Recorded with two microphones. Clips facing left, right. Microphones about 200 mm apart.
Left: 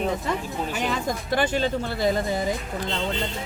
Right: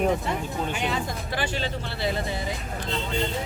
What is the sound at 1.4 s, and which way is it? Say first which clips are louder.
Speech: left 6 dB; 45° left (ahead or behind).